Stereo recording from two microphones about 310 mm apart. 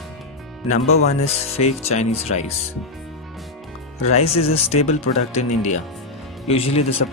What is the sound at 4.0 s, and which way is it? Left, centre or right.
Speech, centre.